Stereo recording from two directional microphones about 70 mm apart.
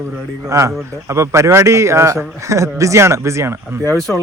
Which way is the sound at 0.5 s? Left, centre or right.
Right.